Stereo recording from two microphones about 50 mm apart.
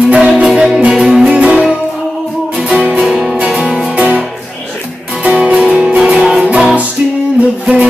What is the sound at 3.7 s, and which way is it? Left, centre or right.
Music, right.